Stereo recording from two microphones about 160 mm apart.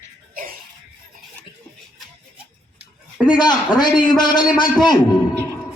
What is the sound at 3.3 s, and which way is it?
Speech, 25° left (ahead or behind).